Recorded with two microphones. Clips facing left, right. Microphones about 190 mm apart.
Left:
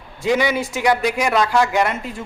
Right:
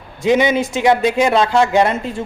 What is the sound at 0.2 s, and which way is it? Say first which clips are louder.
A man's voice: right 4 dB; 20° right (ahead or behind).